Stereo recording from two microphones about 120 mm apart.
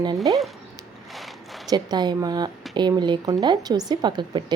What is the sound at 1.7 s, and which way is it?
A woman's voice, 35° right (ahead or behind).